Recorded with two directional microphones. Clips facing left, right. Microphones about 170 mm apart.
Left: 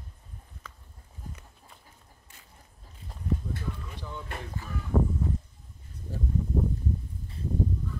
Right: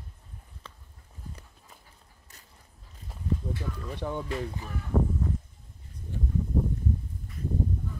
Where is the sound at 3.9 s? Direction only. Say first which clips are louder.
Right 8 dB; 60° right (ahead or behind).